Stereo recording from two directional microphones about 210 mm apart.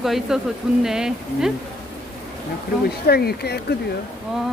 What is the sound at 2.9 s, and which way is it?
Speech, 45° left (ahead or behind).